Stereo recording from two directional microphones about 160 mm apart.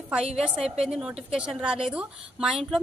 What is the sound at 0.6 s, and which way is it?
A woman's voice, 5° right (ahead or behind).